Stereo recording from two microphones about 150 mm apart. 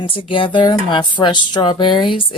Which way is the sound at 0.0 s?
35° left (ahead or behind).